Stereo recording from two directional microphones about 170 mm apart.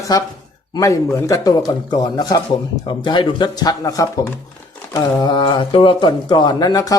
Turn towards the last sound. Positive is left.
turn(degrees=20)  # may be behind; listen again after turning